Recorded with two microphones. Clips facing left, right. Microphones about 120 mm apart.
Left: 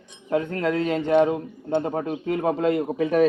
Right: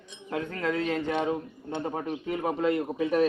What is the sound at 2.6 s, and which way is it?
Speech, 35° left (ahead or behind).